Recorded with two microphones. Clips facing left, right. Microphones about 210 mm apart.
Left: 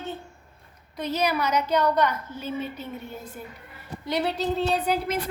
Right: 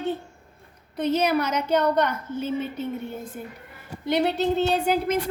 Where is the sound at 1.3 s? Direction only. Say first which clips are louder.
Right 2 dB; 55° right (ahead or behind).